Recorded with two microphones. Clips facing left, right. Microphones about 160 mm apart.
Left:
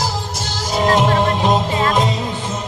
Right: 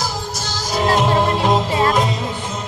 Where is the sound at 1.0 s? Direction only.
20° left (ahead or behind).